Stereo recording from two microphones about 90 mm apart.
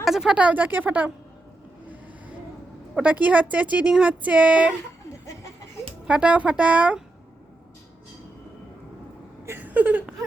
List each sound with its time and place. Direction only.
0.0 s speech: 5° right (ahead or behind)
2.9 s speech: 15° right (ahead or behind)
6.1 s speech: 15° right (ahead or behind)
9.5 s a sound: 20° right (ahead or behind)